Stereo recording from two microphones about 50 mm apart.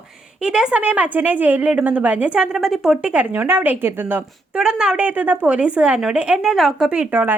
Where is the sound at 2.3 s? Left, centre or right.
Centre.